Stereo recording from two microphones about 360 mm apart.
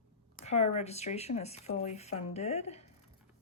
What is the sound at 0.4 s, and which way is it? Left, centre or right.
Speech, centre.